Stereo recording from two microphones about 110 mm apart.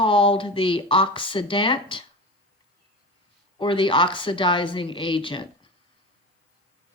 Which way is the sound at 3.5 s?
50° left (ahead or behind).